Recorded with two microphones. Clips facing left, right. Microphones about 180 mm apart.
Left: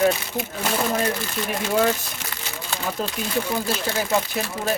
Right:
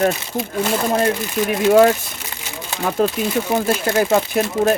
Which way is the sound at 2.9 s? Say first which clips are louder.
Right 10 dB; 65° right (ahead or behind).